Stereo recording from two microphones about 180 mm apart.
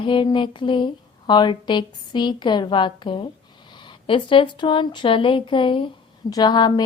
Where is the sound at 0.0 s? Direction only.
25° left (ahead or behind).